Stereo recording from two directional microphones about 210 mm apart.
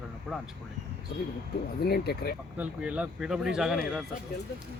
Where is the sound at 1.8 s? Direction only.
50° left (ahead or behind).